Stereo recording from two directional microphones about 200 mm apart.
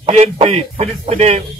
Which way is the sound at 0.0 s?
30° right (ahead or behind).